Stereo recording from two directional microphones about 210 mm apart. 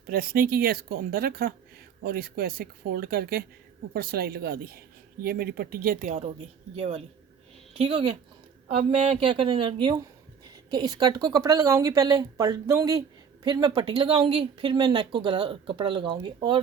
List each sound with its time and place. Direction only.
0.1 s speech: 45° right (ahead or behind); by 16.6 s 20° right (ahead or behind)